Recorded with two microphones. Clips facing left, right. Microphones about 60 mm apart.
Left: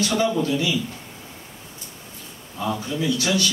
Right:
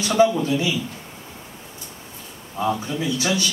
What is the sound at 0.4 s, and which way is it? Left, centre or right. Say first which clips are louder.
Speech: even; centre.